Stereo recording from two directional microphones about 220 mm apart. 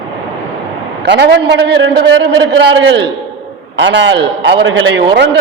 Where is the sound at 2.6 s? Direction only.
55° right (ahead or behind).